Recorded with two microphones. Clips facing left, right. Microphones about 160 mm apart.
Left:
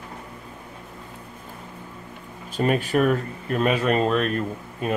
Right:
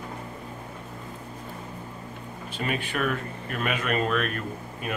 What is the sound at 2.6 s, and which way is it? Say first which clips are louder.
Speech: left 8 dB; 40° left (ahead or behind).